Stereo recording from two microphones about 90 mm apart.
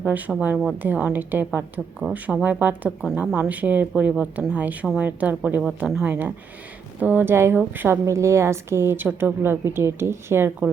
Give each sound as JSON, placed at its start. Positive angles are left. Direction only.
{"t": 0.0, "sound": "a woman's voice", "side_deg": -20}
{"t": 6.1, "sound": "a woman's voice", "side_deg": -20}
{"t": 8.0, "sound": "a woman's voice", "side_deg": -30}